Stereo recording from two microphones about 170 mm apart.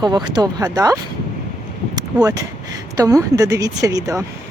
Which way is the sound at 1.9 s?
25° right (ahead or behind).